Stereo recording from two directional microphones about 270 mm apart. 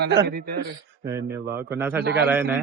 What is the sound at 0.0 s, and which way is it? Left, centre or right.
Speech, right.